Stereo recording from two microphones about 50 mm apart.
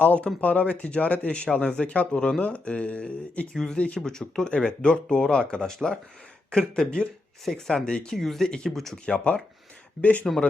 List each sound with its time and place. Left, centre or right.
0.0 s speech: left
3.5 s speech: centre
8.2 s speech: centre
8.4 s speech: centre
9.0 s speech: left